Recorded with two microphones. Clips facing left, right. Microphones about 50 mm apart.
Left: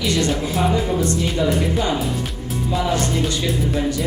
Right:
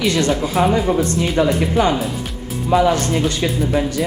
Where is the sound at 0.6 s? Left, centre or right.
Right.